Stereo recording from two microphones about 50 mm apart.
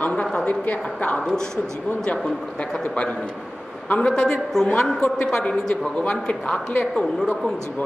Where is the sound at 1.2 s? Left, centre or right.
Centre.